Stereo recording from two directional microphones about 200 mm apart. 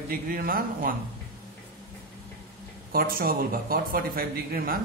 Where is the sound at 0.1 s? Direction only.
45° right (ahead or behind).